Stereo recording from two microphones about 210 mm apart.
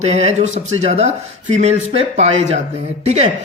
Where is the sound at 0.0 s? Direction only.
30° right (ahead or behind).